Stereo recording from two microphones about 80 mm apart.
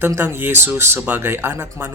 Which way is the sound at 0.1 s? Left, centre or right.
Right.